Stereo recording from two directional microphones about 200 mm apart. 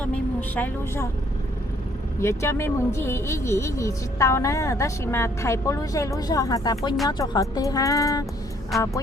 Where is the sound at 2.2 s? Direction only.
15° left (ahead or behind).